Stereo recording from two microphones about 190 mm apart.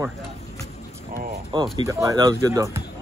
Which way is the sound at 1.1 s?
50° right (ahead or behind).